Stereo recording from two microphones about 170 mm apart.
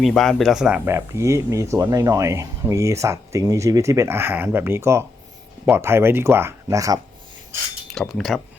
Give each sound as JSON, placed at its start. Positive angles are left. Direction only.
{"t": 0.0, "sound": "speech", "side_deg": 5}
{"t": 7.9, "sound": "speech", "side_deg": 0}